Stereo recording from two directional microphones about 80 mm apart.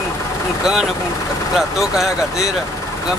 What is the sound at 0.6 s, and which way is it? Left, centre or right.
Speech, centre.